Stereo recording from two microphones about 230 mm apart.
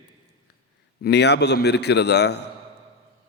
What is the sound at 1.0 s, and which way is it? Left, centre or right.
A man's voice, left.